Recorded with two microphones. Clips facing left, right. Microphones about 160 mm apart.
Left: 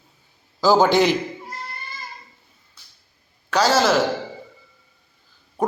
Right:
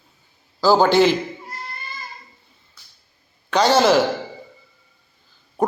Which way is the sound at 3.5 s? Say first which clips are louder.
Right 2 dB; 5° left (ahead or behind).